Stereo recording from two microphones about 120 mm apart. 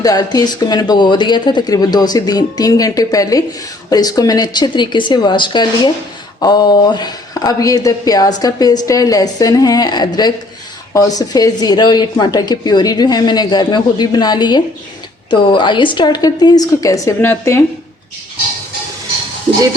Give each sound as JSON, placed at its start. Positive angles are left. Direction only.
{"t": 0.0, "sound": "speech", "side_deg": 30}